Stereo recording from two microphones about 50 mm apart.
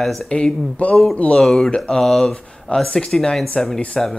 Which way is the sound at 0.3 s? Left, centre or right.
Centre.